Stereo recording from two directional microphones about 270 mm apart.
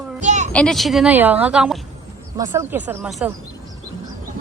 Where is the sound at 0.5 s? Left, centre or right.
Centre.